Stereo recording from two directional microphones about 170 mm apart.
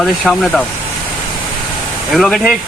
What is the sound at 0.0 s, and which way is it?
Speech, centre (ahead or behind).